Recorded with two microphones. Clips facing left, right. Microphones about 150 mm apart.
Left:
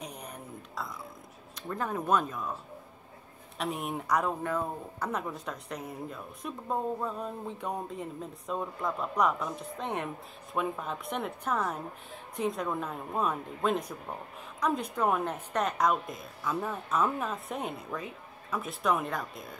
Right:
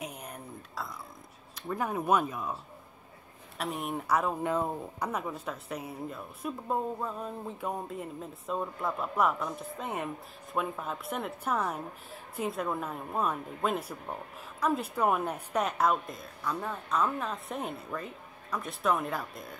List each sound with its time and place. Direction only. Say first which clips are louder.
0.0 s a sound: right 1 dB; 5° right (ahead or behind)
1.5 s speech: right 1 dB; 10° right (ahead or behind)
3.5 s a woman's voice: even; centre (ahead or behind)
4.4 s speech: right 2 dB; 20° right (ahead or behind)
5.1 s a woman's voice: even; 5° right (ahead or behind)